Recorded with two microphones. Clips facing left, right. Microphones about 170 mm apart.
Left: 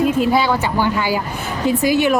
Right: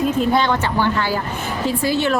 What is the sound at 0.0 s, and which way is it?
A woman's voice, 5° left (ahead or behind).